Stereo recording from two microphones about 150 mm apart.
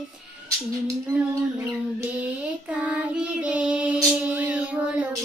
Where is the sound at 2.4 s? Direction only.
10° right (ahead or behind).